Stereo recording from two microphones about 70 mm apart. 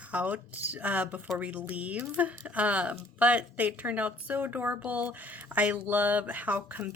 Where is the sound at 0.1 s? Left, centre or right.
Right.